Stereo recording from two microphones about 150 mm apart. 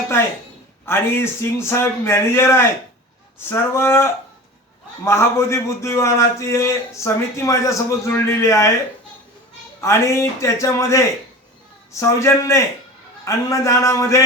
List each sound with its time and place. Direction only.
0.9 s a man's voice: 15° left (ahead or behind)
9.8 s a man's voice: 20° left (ahead or behind)